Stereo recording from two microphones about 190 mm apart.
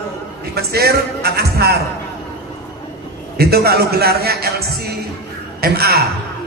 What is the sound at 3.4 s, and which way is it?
A man's voice, 55° right (ahead or behind).